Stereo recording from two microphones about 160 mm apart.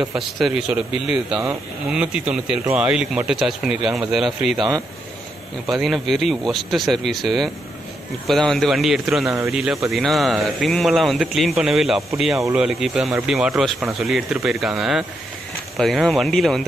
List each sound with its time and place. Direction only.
0.1 s speech: 5° right (ahead or behind)
4.6 s speech: 25° right (ahead or behind)
5.7 s speech: centre (ahead or behind)